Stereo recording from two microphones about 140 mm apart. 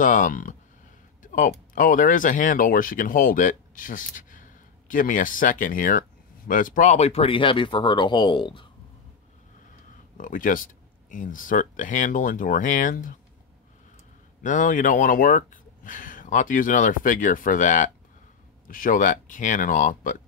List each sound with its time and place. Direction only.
0.0 s speech: 70° left (ahead or behind); by 8.6 s 35° left (ahead or behind)
10.1 s speech: 75° left (ahead or behind)
14.4 s speech: 65° left (ahead or behind)
18.7 s speech: 80° left